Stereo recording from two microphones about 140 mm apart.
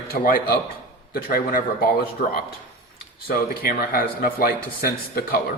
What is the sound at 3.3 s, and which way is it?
A man's voice, 90° left.